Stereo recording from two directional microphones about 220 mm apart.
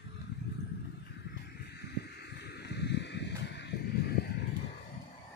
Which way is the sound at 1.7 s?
50° left (ahead or behind).